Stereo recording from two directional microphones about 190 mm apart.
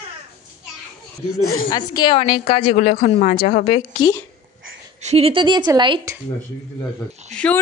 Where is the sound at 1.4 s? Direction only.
45° left (ahead or behind).